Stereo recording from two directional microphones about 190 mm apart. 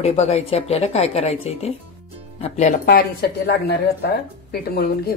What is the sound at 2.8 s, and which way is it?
Speech, 55° left (ahead or behind).